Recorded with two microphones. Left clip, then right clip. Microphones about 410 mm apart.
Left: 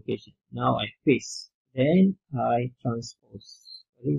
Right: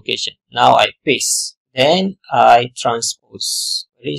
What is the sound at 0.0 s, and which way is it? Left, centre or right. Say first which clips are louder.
Speech: right 13 dB; right.